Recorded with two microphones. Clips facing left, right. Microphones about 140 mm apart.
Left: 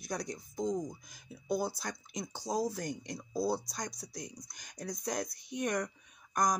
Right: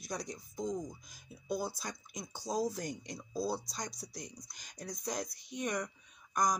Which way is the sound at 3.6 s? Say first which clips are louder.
Left 2 dB; 55° left (ahead or behind).